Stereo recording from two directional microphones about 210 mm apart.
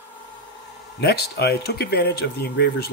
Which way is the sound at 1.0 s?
50° left (ahead or behind).